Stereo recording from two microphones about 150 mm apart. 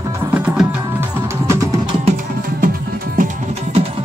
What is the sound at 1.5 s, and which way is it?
Music, 20° right (ahead or behind).